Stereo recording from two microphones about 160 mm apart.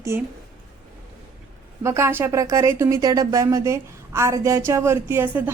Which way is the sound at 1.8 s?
15° right (ahead or behind).